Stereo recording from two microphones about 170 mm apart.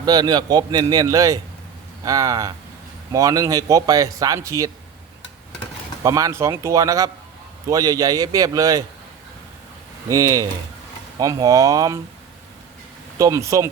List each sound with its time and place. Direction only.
0.0 s a man's voice: 25° right (ahead or behind)
6.0 s a man's voice: 20° right (ahead or behind)
10.1 s a man's voice: 20° right (ahead or behind)
13.1 s a man's voice: 20° right (ahead or behind)